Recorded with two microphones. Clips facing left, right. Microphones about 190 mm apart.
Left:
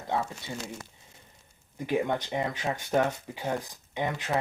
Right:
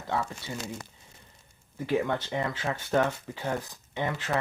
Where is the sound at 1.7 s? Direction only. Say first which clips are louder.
Even; 15° left (ahead or behind).